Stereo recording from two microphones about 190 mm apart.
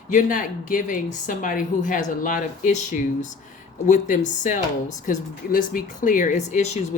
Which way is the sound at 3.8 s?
40° left (ahead or behind).